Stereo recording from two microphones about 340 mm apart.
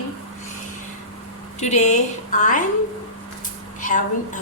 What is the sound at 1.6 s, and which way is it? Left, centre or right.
A woman's voice, centre.